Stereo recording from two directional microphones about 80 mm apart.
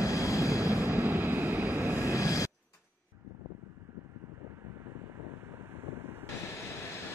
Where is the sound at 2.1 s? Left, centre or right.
Left.